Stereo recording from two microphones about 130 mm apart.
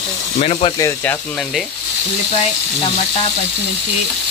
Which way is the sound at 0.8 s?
15° left (ahead or behind).